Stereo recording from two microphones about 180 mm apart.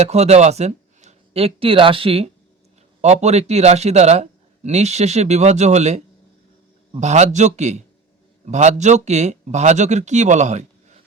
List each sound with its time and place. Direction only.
0.0 s a man's voice: 35° right (ahead or behind)
7.0 s a man's voice: 40° right (ahead or behind)